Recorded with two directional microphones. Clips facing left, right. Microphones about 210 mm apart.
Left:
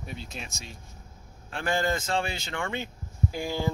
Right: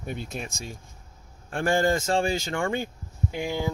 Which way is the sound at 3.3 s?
15° right (ahead or behind).